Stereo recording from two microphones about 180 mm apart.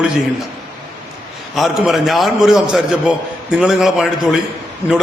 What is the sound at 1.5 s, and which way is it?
A man's voice, centre (ahead or behind).